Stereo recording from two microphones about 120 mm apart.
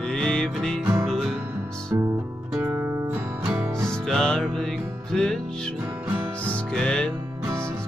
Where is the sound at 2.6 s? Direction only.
15° right (ahead or behind).